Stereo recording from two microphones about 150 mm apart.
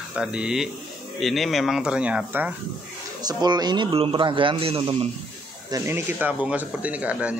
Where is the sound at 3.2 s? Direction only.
25° right (ahead or behind).